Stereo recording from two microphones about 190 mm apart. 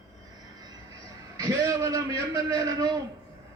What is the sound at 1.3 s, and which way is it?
A man's voice, 15° right (ahead or behind).